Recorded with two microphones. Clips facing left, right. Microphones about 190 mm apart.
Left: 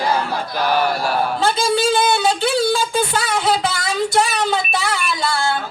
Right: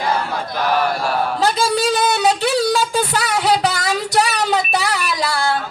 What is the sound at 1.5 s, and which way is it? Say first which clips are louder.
Music: left 1 dB; 30° left (ahead or behind).